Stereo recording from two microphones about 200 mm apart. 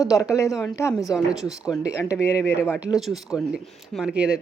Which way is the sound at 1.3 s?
5° right (ahead or behind).